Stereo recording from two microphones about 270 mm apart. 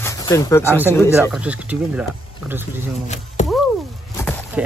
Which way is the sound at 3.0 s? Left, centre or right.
Left.